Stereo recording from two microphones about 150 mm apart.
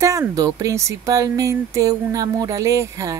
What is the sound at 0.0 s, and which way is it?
Speech, 20° right (ahead or behind).